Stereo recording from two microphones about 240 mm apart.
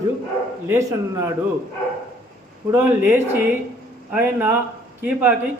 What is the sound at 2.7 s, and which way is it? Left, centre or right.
A man's voice, centre.